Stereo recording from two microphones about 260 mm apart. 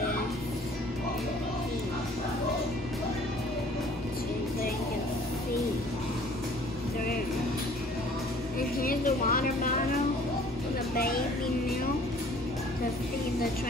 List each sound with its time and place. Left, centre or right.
8.5 s music: left